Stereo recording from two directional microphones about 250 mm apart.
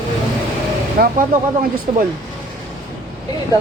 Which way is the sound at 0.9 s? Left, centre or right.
Right.